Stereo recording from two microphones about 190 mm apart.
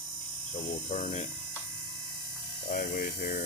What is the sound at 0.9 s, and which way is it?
Speech, 35° left (ahead or behind).